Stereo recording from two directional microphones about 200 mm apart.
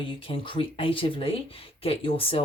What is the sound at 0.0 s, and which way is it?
Speech, 25° left (ahead or behind).